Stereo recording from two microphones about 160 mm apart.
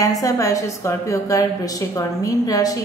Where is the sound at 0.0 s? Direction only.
20° left (ahead or behind).